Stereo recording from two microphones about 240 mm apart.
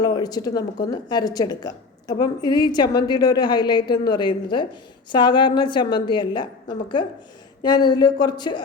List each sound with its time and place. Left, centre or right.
0.0 s a woman's voice: centre